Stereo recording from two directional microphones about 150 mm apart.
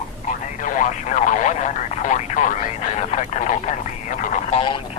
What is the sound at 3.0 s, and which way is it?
Radio, 50° left (ahead or behind).